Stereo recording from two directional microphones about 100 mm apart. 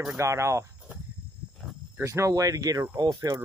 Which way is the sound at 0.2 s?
30° right (ahead or behind).